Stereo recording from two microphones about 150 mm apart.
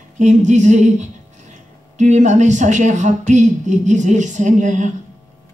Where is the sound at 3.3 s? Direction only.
55° right (ahead or behind).